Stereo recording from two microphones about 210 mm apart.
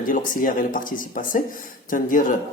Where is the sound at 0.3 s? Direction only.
40° left (ahead or behind).